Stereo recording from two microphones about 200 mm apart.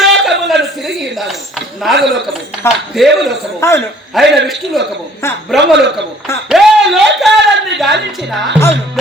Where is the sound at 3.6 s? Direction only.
15° left (ahead or behind).